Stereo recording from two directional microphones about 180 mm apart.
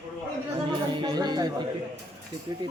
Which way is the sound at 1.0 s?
25° right (ahead or behind).